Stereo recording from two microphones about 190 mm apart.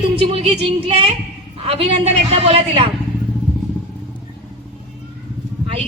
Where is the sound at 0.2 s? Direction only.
30° right (ahead or behind).